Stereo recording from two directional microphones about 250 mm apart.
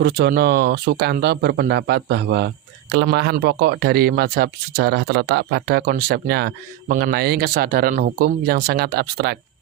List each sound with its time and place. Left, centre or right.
0.0 s speech: right